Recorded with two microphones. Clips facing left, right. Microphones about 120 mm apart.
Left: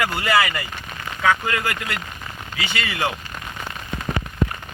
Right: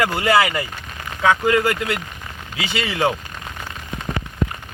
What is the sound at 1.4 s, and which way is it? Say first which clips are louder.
Speech: right 8 dB; 5° right (ahead or behind).